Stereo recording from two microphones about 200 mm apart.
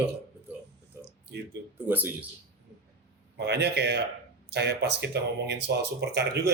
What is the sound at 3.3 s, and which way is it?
Speech, 55° right (ahead or behind).